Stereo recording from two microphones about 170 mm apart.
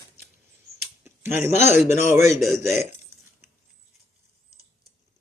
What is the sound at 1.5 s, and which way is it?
Speech, 45° left (ahead or behind).